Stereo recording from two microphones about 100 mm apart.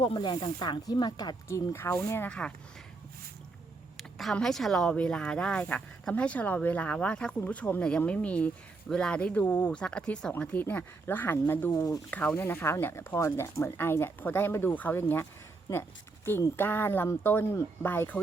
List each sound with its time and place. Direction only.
0.0 s speech: 50° left (ahead or behind)
1.5 s speech: 30° left (ahead or behind)
3.9 s speech: centre (ahead or behind)
12.5 s speech: 25° left (ahead or behind)